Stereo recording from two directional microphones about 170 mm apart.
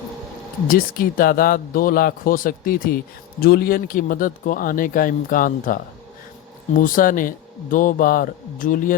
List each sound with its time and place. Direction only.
0.7 s speech: 55° left (ahead or behind)